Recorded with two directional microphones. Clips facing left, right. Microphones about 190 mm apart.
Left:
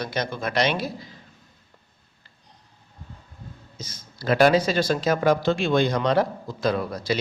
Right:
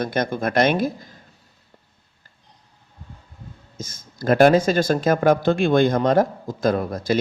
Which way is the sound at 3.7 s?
50° right (ahead or behind).